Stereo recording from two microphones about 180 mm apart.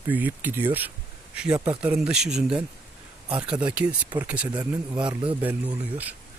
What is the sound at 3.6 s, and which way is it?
Speech, 5° right (ahead or behind).